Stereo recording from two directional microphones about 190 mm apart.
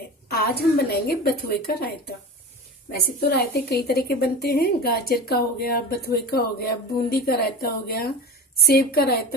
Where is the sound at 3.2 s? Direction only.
55° left (ahead or behind).